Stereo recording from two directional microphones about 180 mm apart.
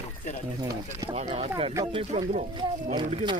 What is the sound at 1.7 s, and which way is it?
Speech, 20° right (ahead or behind).